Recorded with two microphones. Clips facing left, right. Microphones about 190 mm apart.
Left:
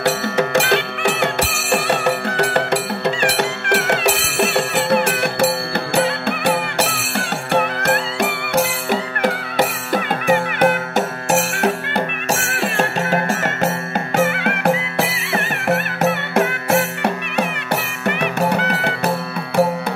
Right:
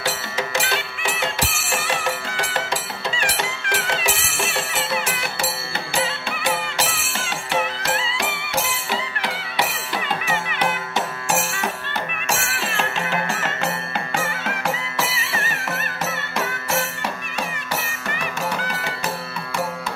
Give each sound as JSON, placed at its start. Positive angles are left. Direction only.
{"t": 0.0, "sound": "music", "side_deg": 65}
{"t": 14.2, "sound": "music", "side_deg": 60}